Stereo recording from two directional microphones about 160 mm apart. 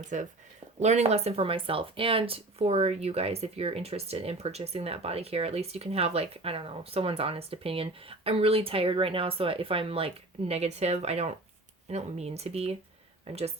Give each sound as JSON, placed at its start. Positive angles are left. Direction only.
{"t": 0.1, "sound": "speech", "side_deg": -50}